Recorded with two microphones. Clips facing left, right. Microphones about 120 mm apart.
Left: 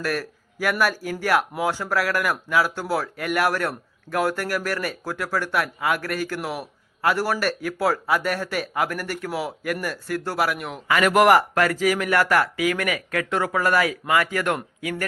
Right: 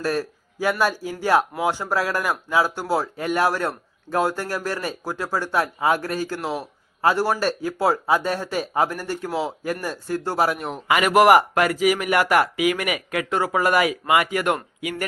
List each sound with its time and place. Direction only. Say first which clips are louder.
0.0 s speech: right 3 dB; 25° right (ahead or behind)
3.5 s speech: even; 15° right (ahead or behind); by 10.8 s 30° right (ahead or behind)
10.8 s speech: even; 15° right (ahead or behind)
11.1 s speech: right 2 dB; 5° right (ahead or behind)
11.3 s speech: right 2 dB; 15° right (ahead or behind)